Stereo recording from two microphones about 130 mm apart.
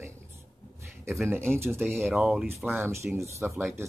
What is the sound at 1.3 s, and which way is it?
Speech, 20° right (ahead or behind).